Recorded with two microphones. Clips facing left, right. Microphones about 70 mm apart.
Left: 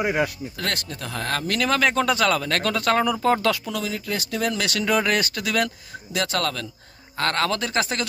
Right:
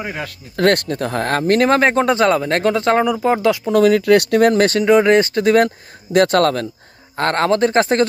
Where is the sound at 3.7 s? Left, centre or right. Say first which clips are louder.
Right 16 dB; right.